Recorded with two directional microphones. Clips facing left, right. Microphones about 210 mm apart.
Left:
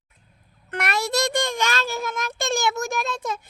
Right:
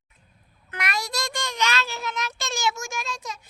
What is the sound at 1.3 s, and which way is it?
Child singing, 55° left (ahead or behind).